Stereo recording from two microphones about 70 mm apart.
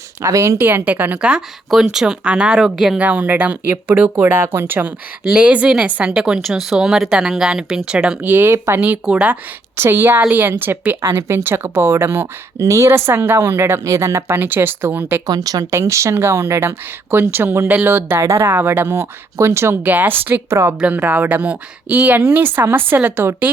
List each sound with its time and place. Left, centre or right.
0.2 s speech: right
0.6 s speech: right
1.7 s speech: centre
3.0 s a woman's voice: right
5.3 s speech: centre
8.2 s speech: right
9.7 s a woman's voice: right
15.3 s speech: right
15.7 s a woman's voice: right
18.2 s a woman's voice: right
19.8 s speech: right